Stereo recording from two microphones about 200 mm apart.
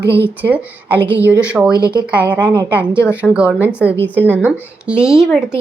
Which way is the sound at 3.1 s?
5° right (ahead or behind).